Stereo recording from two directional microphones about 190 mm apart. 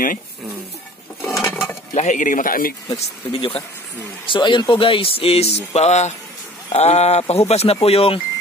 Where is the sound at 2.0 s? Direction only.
40° left (ahead or behind).